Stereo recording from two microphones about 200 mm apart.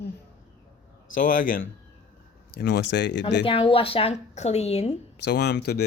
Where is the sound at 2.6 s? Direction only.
60° left (ahead or behind).